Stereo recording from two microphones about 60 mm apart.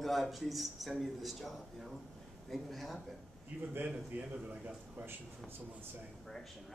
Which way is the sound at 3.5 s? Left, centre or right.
Centre.